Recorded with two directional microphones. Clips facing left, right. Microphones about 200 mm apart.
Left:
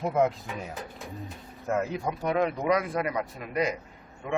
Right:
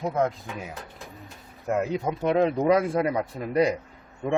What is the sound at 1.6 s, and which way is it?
Speech, 15° right (ahead or behind).